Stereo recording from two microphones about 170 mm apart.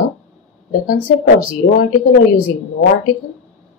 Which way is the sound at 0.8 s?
55° left (ahead or behind).